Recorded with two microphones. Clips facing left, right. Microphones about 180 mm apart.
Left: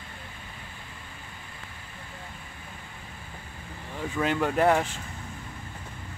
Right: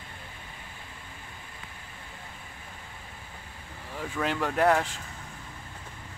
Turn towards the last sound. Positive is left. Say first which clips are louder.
# left 1 dB
turn(degrees=0)  # may be behind; listen again after turning